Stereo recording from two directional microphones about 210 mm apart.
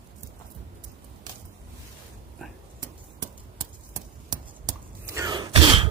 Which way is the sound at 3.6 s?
20° right (ahead or behind).